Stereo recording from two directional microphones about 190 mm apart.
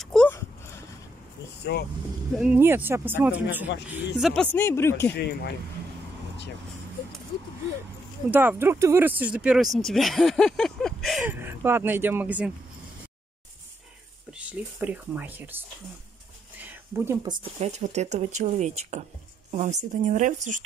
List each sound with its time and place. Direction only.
0.0 s a sound: 5° left (ahead or behind)
1.7 s speech: 60° left (ahead or behind)
2.3 s speech: 5° right (ahead or behind); by 5.1 s 15° left (ahead or behind)
8.3 s speech: 10° right (ahead or behind)
14.3 s speech: 5° right (ahead or behind)
16.6 s a sound: 10° right (ahead or behind)
17.6 s speech: 35° right (ahead or behind)